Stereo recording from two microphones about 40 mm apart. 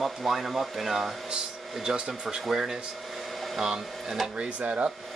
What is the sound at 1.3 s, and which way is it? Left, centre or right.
Speech, centre.